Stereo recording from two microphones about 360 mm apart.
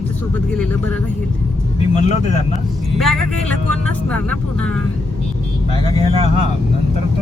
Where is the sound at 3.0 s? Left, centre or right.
Centre.